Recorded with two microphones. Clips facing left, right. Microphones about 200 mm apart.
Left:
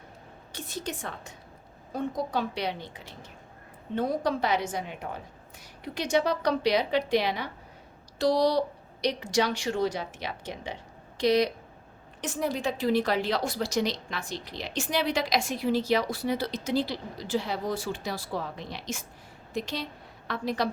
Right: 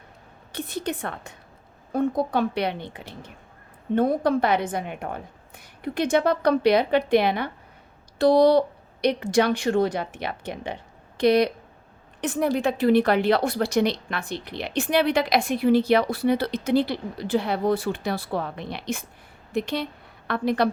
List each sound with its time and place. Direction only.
0.5 s a woman's voice: 60° right (ahead or behind)